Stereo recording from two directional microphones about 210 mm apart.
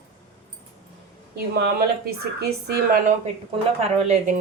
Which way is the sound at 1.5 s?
50° right (ahead or behind).